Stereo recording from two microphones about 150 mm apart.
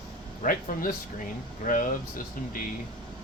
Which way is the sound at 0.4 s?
65° left (ahead or behind).